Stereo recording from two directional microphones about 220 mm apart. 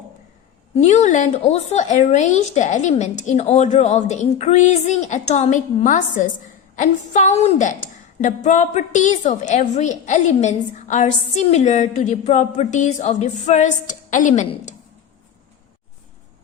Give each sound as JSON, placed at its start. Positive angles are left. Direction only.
{"t": 0.8, "sound": "a woman's voice", "side_deg": 30}